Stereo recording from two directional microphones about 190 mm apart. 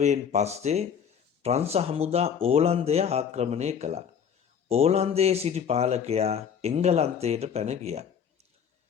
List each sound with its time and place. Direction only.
0.0 s speech: 35° right (ahead or behind)